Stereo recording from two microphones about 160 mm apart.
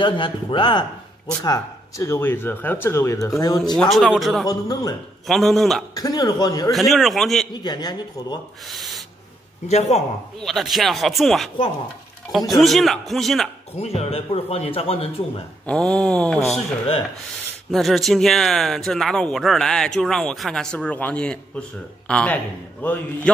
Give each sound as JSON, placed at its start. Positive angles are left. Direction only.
{"t": 0.0, "sound": "speech", "side_deg": 30}
{"t": 3.7, "sound": "speech", "side_deg": 0}
{"t": 4.5, "sound": "speech", "side_deg": 25}
{"t": 5.2, "sound": "speech", "side_deg": 0}
{"t": 5.9, "sound": "speech", "side_deg": 25}
{"t": 6.7, "sound": "speech", "side_deg": 0}
{"t": 7.5, "sound": "speech", "side_deg": 25}
{"t": 8.6, "sound": "owl", "side_deg": 0}
{"t": 9.7, "sound": "a man's voice", "side_deg": 40}
{"t": 10.4, "sound": "speech", "side_deg": 0}
{"t": 13.7, "sound": "a man's voice", "side_deg": 40}
{"t": 15.6, "sound": "speech", "side_deg": 5}
{"t": 17.6, "sound": "speech", "side_deg": 0}